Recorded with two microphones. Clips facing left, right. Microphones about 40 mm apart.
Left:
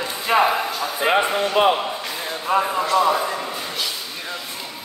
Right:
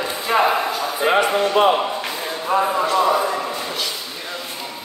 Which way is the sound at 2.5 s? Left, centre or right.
Left.